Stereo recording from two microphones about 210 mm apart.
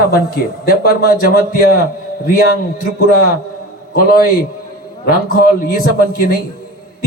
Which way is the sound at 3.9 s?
45° left (ahead or behind).